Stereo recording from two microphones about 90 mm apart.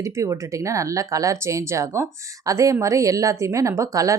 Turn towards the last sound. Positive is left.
turn(degrees=-35)  # may be behind; listen again after turning